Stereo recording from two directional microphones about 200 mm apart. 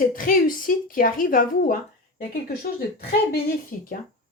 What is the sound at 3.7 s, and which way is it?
Speech, 45° left (ahead or behind).